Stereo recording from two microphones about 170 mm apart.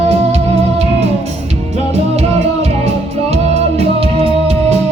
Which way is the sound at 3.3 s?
35° right (ahead or behind).